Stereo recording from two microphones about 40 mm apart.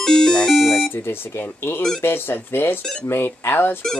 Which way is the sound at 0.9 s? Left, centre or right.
Left.